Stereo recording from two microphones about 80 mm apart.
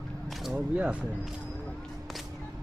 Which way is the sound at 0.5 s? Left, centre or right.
Centre.